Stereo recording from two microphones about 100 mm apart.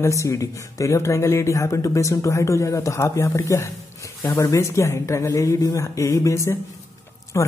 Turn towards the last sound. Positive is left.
turn(degrees=30)  # may be behind; listen again after turning